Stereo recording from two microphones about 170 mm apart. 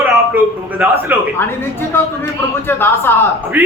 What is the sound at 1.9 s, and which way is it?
A man's voice, 15° left (ahead or behind).